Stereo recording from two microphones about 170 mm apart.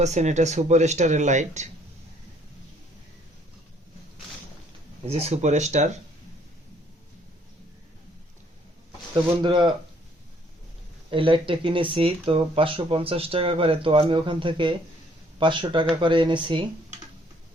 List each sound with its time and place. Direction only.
0.0 s speech: 40° right (ahead or behind)
5.0 s speech: 35° right (ahead or behind)
9.4 s speech: 25° right (ahead or behind)
11.1 s speech: 30° right (ahead or behind)